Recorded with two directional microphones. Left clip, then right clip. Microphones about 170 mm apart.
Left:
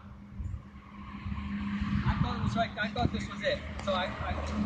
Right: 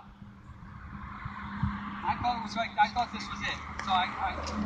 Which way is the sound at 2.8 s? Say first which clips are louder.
Right 6 dB; 25° right (ahead or behind).